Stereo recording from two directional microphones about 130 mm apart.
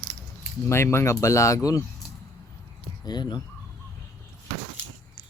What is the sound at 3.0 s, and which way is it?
Speech, 35° left (ahead or behind).